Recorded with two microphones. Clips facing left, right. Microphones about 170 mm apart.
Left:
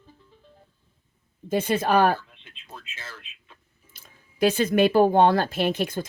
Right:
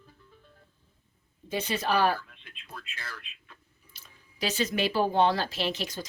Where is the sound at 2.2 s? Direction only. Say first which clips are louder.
Right 1 dB; 25° left (ahead or behind).